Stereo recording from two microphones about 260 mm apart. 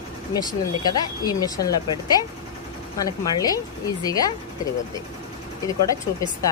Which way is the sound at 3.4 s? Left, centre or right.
Centre.